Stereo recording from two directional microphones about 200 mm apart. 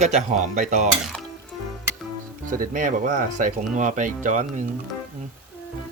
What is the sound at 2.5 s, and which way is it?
Speech, 40° right (ahead or behind).